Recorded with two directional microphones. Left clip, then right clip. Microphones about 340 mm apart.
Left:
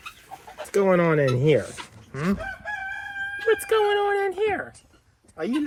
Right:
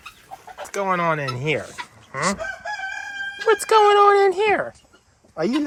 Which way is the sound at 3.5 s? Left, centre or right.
Centre.